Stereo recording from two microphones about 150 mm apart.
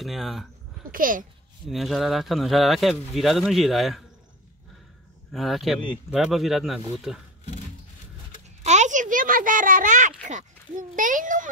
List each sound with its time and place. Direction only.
0.0 s speech: centre (ahead or behind)
0.9 s a child's voice: 65° right (ahead or behind)
1.7 s speech: centre (ahead or behind)
5.3 s speech: centre (ahead or behind)
8.6 s a child's voice: 50° right (ahead or behind)